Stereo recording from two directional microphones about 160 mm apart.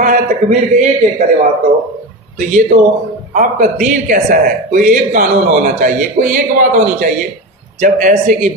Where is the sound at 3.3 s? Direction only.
50° right (ahead or behind).